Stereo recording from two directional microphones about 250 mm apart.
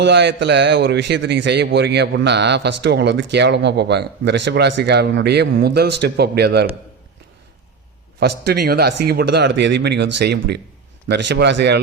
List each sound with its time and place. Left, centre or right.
0.0 s a man's voice: right
8.2 s a man's voice: right